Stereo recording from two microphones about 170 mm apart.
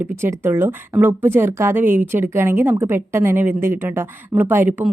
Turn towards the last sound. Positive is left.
turn(degrees=-10)  # may be behind; listen again after turning